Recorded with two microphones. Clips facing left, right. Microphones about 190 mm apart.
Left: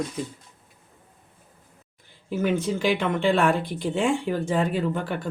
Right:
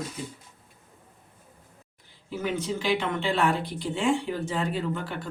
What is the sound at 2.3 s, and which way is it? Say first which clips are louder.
Speech: left 5 dB; 50° left (ahead or behind).